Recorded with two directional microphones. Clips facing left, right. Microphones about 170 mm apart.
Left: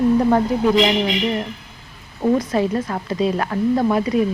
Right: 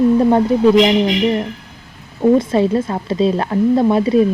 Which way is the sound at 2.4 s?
25° right (ahead or behind).